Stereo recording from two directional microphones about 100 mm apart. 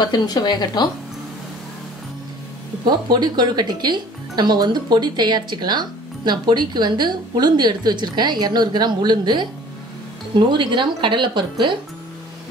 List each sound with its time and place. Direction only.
0.0 s speech: 45° left (ahead or behind)
2.8 s speech: 45° right (ahead or behind)